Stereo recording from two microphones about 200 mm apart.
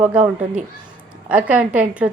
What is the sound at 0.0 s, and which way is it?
Speech, 5° right (ahead or behind).